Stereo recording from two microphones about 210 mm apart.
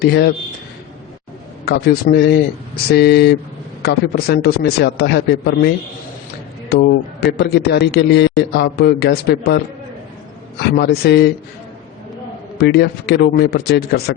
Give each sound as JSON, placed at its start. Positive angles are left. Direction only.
{"t": 0.0, "sound": "a man's voice", "side_deg": 50}
{"t": 1.6, "sound": "a man's voice", "side_deg": 50}
{"t": 10.7, "sound": "a man's voice", "side_deg": 50}
{"t": 12.5, "sound": "a man's voice", "side_deg": 50}